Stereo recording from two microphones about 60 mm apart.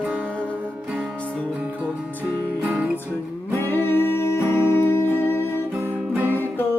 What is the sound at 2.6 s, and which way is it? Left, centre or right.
Music, right.